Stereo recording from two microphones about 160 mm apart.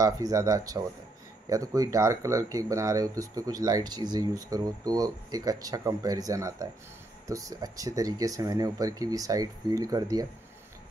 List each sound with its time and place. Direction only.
0.0 s speech: 20° right (ahead or behind)